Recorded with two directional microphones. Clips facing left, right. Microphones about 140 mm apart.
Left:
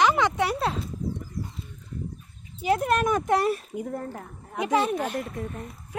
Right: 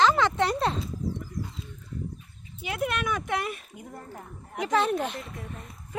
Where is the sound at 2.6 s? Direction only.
40° left (ahead or behind).